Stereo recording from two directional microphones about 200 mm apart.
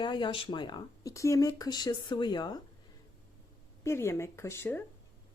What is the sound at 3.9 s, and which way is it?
Speech, 15° left (ahead or behind).